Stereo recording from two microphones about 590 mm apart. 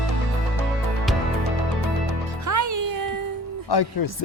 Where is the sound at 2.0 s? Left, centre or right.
Right.